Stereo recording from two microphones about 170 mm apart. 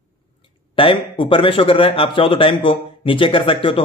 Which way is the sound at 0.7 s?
30° left (ahead or behind).